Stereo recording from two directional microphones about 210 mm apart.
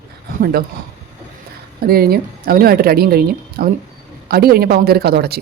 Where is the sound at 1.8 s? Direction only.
45° right (ahead or behind).